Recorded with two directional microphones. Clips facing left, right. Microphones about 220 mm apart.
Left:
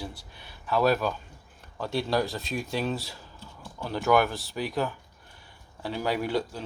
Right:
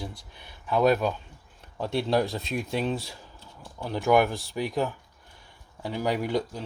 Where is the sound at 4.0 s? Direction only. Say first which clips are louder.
Right 1 dB; 20° right (ahead or behind).